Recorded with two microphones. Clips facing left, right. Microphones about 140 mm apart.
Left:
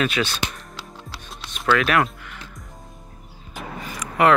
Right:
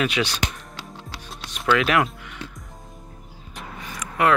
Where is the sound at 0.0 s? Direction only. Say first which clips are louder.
Left 1 dB; 15° right (ahead or behind).